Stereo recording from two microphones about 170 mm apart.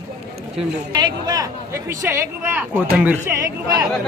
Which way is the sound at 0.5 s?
25° right (ahead or behind).